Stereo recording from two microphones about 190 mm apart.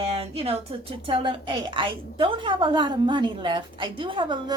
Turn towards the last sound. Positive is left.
turn(degrees=-25)  # may be behind; listen again after turning